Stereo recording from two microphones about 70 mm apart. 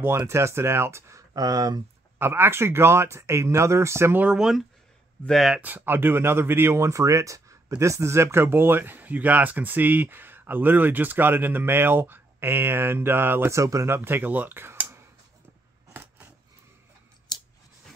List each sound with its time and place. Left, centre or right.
0.3 s speech: right
1.3 s speech: right
2.1 s speech: right
4.2 s speech: centre
5.2 s speech: centre
5.6 s speech: right
13.8 s speech: right
15.9 s a sound: right